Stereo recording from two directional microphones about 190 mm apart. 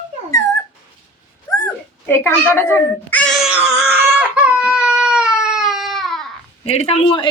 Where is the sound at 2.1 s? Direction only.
10° left (ahead or behind).